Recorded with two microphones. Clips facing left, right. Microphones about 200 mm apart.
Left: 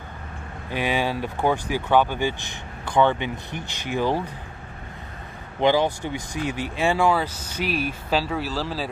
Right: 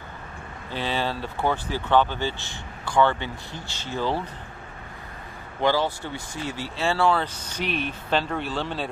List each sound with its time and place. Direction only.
0.7 s speech: 15° left (ahead or behind)
5.6 s speech: 15° left (ahead or behind); by 8.8 s centre (ahead or behind)